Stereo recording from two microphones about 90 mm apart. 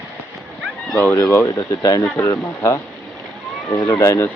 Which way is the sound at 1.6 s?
45° left (ahead or behind).